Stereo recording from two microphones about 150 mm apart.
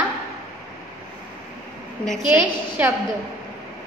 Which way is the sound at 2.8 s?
10° right (ahead or behind).